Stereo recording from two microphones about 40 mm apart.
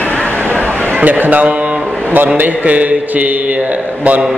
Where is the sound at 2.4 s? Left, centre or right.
Right.